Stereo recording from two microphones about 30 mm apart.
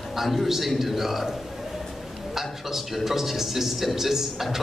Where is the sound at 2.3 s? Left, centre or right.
Centre.